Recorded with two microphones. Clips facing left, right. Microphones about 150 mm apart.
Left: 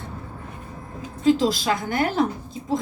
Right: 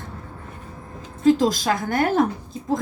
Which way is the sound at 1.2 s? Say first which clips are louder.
Right 2 dB; 45° right (ahead or behind).